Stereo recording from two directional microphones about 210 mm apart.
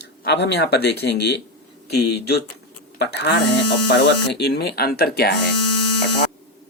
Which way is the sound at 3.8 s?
55° left (ahead or behind).